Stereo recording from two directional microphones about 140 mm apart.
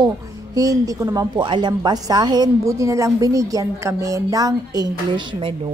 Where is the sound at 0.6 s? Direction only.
25° right (ahead or behind).